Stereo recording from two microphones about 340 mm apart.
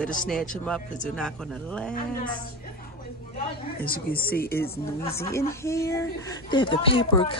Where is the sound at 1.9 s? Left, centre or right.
Left.